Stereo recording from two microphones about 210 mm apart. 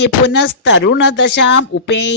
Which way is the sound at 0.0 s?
55° left (ahead or behind).